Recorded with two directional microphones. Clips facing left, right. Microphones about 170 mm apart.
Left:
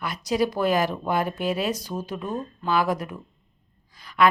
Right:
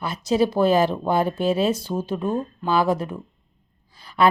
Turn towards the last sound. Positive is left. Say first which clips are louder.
# right 2 dB
turn(degrees=-30)  # may be behind; listen again after turning